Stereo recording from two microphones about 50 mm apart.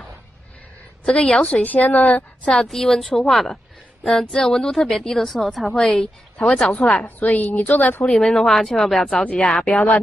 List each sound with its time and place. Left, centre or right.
1.0 s speech: centre
1.6 s a woman's voice: left
2.4 s speech: centre
6.7 s speech: left
7.2 s a woman's voice: left
8.0 s speech: centre
9.0 s speech: left